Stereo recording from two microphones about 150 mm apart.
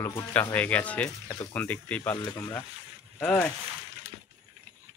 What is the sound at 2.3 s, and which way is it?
Speech, 20° left (ahead or behind).